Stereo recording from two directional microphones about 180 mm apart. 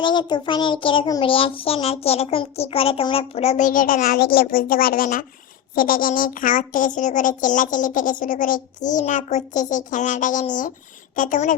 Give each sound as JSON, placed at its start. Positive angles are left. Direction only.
{"t": 0.0, "sound": "child singing", "side_deg": 25}
{"t": 5.7, "sound": "a child's voice", "side_deg": 50}